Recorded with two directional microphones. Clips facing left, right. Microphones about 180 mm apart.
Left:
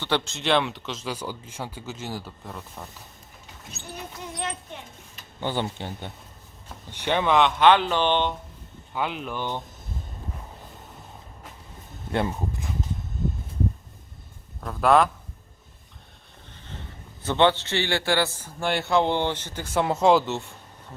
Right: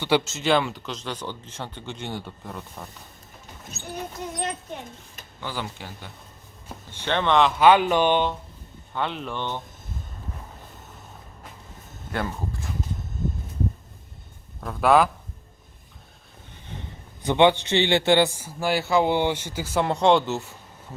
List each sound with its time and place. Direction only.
0.0 s speech: 5° right (ahead or behind)
5.4 s speech: 25° left (ahead or behind)
6.9 s speech: 15° left (ahead or behind)
7.7 s speech: 10° right (ahead or behind)
8.9 s speech: 5° left (ahead or behind)
12.1 s speech: 20° left (ahead or behind)
14.6 s speech: centre (ahead or behind)
16.7 s a sound: 10° right (ahead or behind)
17.2 s speech: 15° right (ahead or behind)